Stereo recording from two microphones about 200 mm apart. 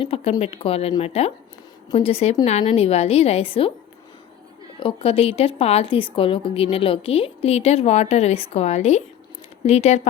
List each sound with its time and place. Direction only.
0.0 s a woman's voice: 30° left (ahead or behind)
4.8 s a woman's voice: 25° left (ahead or behind)